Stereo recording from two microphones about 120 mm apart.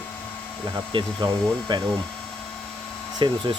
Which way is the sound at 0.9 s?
45° right (ahead or behind).